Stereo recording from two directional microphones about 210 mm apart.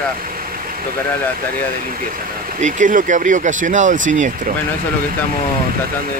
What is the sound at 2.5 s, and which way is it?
Speech, 35° right (ahead or behind).